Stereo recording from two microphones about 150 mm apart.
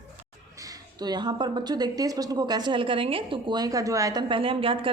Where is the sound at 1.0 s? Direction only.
30° right (ahead or behind).